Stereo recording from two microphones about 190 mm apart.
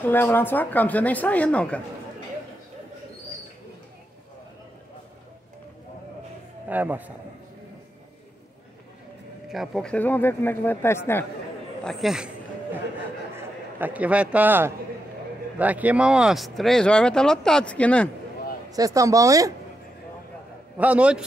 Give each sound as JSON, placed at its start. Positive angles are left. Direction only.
{"t": 0.0, "sound": "speech", "side_deg": 10}
{"t": 6.7, "sound": "speech", "side_deg": -10}
{"t": 9.5, "sound": "speech", "side_deg": 0}
{"t": 11.8, "sound": "speech", "side_deg": 0}
{"t": 13.4, "sound": "a man's voice", "side_deg": -10}
{"t": 18.7, "sound": "speech", "side_deg": -20}
{"t": 20.7, "sound": "speech", "side_deg": -5}